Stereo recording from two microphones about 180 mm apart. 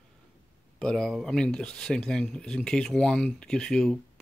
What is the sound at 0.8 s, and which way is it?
Speech, 5° left (ahead or behind).